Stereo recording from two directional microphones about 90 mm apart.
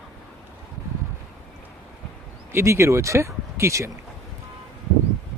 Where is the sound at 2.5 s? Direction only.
30° right (ahead or behind).